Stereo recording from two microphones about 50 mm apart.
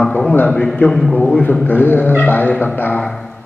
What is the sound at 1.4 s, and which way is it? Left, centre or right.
A man's voice, left.